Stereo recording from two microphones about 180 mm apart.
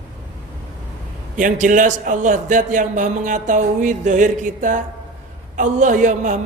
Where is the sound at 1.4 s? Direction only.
45° right (ahead or behind).